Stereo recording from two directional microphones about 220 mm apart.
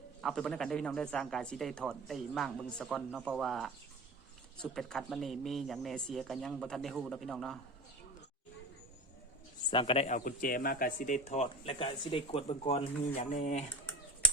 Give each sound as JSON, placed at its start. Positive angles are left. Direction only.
{"t": 0.2, "sound": "speech", "side_deg": 0}
{"t": 9.6, "sound": "speech", "side_deg": 25}